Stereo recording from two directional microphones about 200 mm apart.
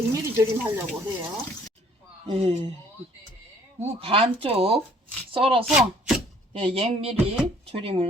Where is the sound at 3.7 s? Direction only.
30° right (ahead or behind).